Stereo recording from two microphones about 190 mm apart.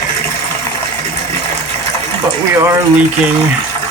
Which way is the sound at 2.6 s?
15° right (ahead or behind).